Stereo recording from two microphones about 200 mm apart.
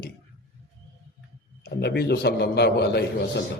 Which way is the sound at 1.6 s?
55° left (ahead or behind).